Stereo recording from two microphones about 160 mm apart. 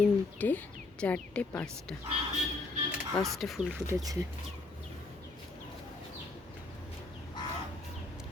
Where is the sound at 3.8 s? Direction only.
20° right (ahead or behind).